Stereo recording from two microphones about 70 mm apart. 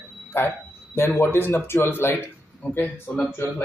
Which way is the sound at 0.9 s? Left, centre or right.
Left.